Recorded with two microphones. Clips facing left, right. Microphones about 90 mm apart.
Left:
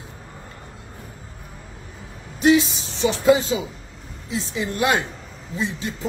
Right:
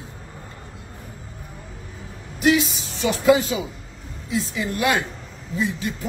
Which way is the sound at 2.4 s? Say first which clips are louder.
Left 2 dB; 30° left (ahead or behind).